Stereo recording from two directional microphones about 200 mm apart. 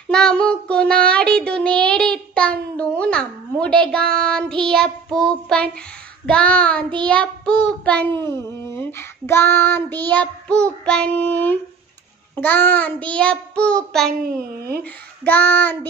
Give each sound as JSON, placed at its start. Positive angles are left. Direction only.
{"t": 0.1, "sound": "child singing", "side_deg": 5}
{"t": 14.2, "sound": "a child's voice", "side_deg": -50}
{"t": 14.8, "sound": "child singing", "side_deg": 10}